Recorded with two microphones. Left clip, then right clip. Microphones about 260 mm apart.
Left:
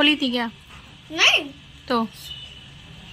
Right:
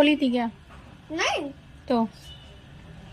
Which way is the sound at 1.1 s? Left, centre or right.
Centre.